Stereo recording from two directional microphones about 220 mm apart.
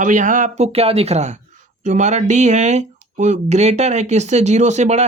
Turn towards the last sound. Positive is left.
turn(degrees=-30)  # may be behind; listen again after turning